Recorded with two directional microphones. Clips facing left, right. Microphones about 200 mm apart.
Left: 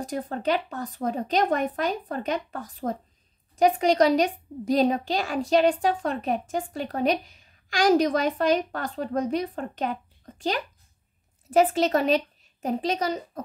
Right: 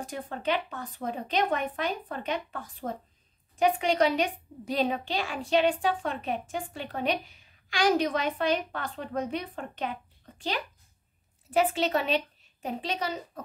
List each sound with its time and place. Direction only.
0.0 s a woman's voice: 40° left (ahead or behind)